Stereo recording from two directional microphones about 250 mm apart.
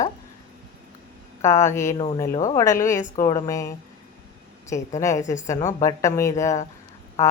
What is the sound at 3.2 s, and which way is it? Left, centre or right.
A woman's voice, centre.